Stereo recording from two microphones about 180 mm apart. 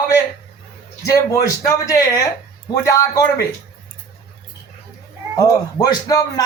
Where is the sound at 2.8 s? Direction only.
20° left (ahead or behind).